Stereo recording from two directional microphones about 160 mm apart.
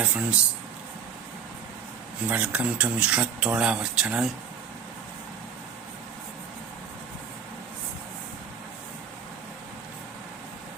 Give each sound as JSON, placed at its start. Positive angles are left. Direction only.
{"t": 0.0, "sound": "speech", "side_deg": -10}
{"t": 2.2, "sound": "speech", "side_deg": -10}